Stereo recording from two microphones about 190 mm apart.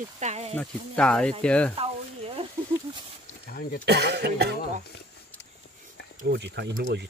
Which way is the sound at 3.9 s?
60° right (ahead or behind).